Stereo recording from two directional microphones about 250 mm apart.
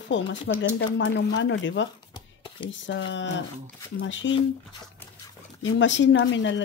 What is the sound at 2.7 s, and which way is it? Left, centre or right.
Speech, left.